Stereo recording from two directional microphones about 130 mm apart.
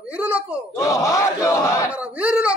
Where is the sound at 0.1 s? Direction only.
10° right (ahead or behind).